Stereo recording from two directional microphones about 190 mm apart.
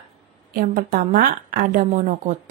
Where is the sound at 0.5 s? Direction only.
50° right (ahead or behind).